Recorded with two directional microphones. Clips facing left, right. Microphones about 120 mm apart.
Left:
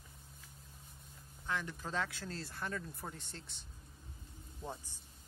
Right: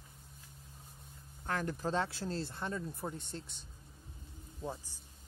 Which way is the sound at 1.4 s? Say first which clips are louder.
Right 5 dB; 45° right (ahead or behind).